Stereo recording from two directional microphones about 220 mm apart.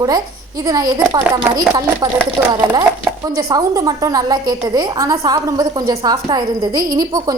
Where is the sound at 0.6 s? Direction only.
15° right (ahead or behind).